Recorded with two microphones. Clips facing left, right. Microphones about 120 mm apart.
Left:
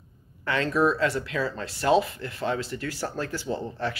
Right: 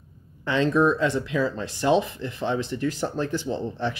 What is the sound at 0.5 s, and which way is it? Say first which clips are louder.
Speech: right 3 dB; 20° right (ahead or behind).